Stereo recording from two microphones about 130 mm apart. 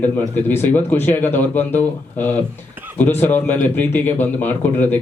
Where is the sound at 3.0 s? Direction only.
15° left (ahead or behind).